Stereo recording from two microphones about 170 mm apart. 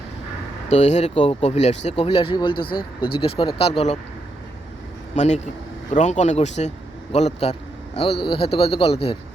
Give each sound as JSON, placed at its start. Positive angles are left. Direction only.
{"t": 0.7, "sound": "speech", "side_deg": 40}
{"t": 5.1, "sound": "speech", "side_deg": 40}